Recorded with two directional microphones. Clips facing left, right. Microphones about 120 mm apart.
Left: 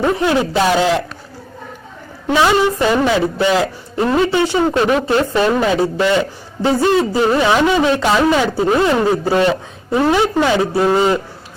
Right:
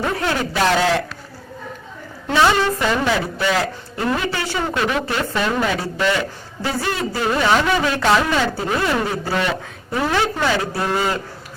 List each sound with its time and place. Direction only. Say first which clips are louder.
0.0 s a woman's voice: left 6 dB; 20° left (ahead or behind)
2.2 s a woman's voice: left 3 dB; 15° left (ahead or behind)
4.7 s a woman's voice: left 7 dB; 35° left (ahead or behind)